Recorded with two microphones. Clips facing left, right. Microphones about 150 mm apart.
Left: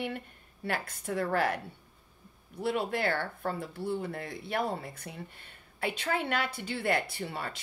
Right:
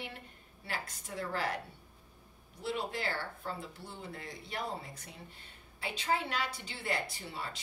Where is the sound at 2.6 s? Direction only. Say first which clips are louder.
Left 6 dB; 60° left (ahead or behind).